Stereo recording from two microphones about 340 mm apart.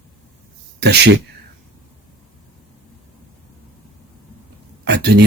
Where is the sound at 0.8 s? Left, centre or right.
Right.